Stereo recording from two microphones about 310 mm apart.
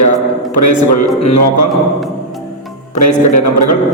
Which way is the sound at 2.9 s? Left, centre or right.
Left.